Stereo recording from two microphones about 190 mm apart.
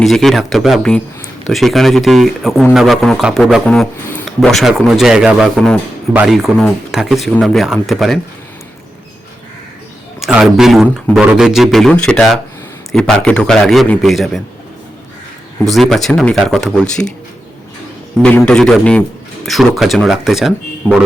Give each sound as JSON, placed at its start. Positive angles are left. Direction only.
{"t": 0.0, "sound": "speech", "side_deg": 0}
{"t": 10.2, "sound": "speech", "side_deg": 0}
{"t": 15.7, "sound": "speech", "side_deg": 0}
{"t": 18.2, "sound": "speech", "side_deg": 5}